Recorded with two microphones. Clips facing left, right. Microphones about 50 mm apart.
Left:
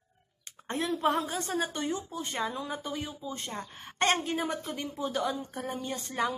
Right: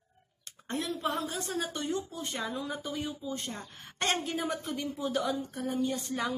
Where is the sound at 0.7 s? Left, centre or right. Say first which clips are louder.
Left 4 dB; left.